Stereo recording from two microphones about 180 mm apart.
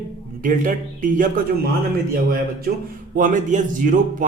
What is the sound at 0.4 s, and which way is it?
Speech, 50° right (ahead or behind).